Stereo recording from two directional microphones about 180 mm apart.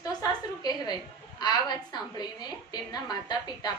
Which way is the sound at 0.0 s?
20° left (ahead or behind).